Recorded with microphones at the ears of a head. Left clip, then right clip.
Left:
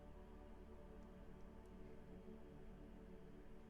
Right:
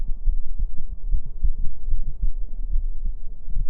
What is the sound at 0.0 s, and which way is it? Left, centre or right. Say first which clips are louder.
Heart sounds: right 7 dB; right.